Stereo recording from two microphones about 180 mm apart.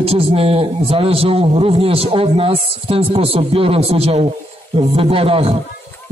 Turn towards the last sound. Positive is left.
turn(degrees=-30)  # may be behind; listen again after turning